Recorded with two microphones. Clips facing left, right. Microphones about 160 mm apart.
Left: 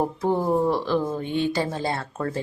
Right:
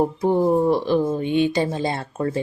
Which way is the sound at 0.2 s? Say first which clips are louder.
Right 3 dB; 15° right (ahead or behind).